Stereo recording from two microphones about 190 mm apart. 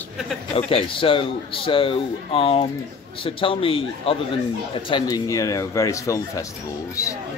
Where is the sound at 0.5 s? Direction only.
30° left (ahead or behind).